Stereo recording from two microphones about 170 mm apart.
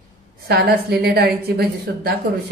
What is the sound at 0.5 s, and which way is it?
A woman's voice, 70° right (ahead or behind).